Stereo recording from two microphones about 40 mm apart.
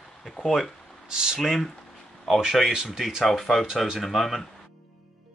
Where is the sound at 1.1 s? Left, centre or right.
Centre.